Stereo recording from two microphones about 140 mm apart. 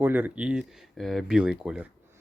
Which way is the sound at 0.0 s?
15° right (ahead or behind).